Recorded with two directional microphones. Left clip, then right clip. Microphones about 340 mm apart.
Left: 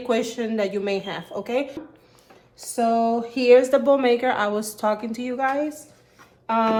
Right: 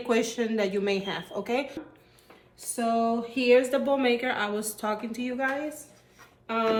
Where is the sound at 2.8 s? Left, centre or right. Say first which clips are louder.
Left 6 dB; centre.